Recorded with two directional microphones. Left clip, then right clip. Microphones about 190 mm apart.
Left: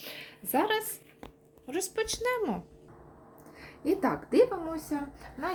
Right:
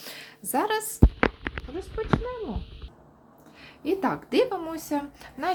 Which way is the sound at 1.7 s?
10° left (ahead or behind).